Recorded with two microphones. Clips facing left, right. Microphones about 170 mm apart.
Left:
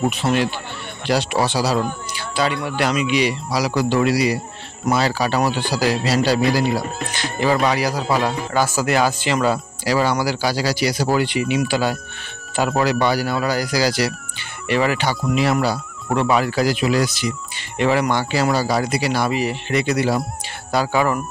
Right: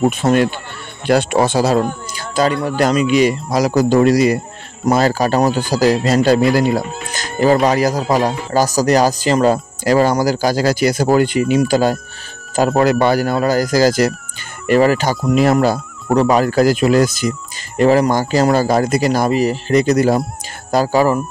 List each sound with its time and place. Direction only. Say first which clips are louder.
0.1 s speech: right 5 dB; 50° right (ahead or behind)